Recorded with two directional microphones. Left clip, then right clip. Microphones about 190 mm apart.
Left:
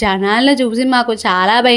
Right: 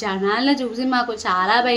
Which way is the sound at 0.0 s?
45° left (ahead or behind).